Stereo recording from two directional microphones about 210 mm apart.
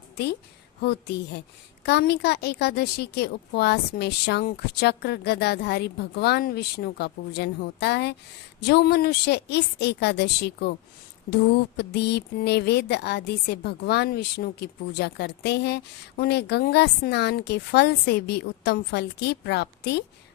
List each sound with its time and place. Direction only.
0.8 s speech: 50° left (ahead or behind)